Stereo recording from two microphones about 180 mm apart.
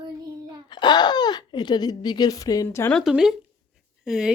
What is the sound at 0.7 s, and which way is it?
Speech, 25° left (ahead or behind).